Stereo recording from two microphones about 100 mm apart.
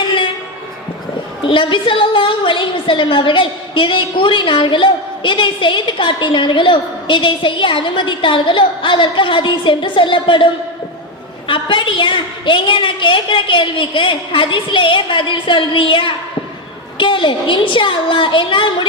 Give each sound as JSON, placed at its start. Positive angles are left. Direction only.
{"t": 1.5, "sound": "a woman's voice", "side_deg": 60}